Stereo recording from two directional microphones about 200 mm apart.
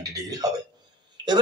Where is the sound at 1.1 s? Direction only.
20° right (ahead or behind).